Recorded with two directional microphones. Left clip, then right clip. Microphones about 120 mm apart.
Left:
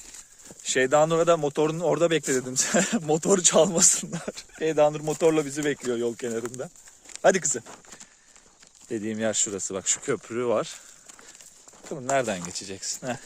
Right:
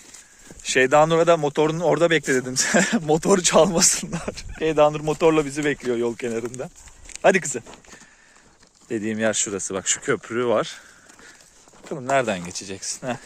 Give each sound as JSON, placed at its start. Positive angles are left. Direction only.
{"t": 0.4, "sound": "speech", "side_deg": 5}
{"t": 2.5, "sound": "speech", "side_deg": 15}
{"t": 8.9, "sound": "speech", "side_deg": 15}
{"t": 12.1, "sound": "speech", "side_deg": 20}